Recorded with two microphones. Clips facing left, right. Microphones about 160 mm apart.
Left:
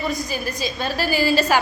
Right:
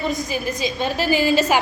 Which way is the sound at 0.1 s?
20° right (ahead or behind).